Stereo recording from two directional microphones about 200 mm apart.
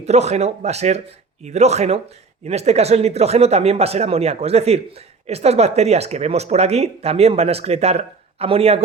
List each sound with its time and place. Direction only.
0.0 s speech: 35° right (ahead or behind)